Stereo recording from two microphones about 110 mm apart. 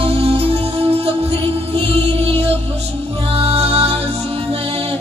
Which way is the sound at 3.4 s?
60° right (ahead or behind).